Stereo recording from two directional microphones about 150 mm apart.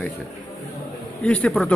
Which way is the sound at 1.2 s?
5° left (ahead or behind).